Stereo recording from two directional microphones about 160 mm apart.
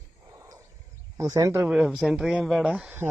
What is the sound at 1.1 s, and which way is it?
Speech, 20° right (ahead or behind).